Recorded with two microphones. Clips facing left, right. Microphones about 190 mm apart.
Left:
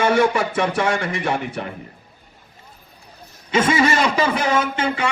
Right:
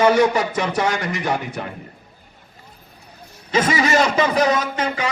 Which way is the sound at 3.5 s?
30° left (ahead or behind).